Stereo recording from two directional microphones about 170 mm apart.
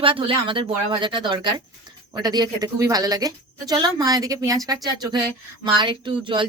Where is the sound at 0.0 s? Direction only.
30° right (ahead or behind).